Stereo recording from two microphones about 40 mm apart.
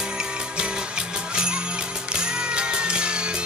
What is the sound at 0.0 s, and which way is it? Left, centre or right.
Music, right.